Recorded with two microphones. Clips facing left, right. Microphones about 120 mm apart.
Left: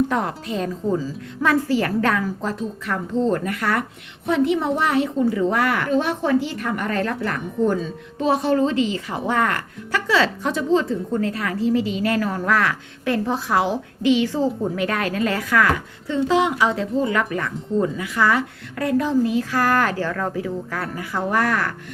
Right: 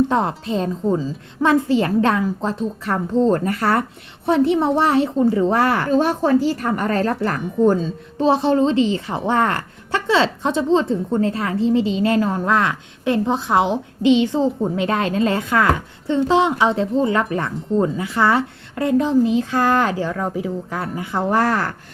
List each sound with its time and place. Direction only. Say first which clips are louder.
0.1 s a woman's voice: right 4 dB; 25° right (ahead or behind)